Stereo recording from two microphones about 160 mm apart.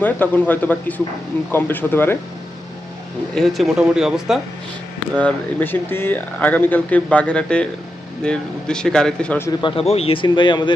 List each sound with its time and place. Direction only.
0.0 s speech: 10° left (ahead or behind)
3.3 s speech: centre (ahead or behind)
5.2 s speech: 10° left (ahead or behind)
9.6 s speech: 35° left (ahead or behind)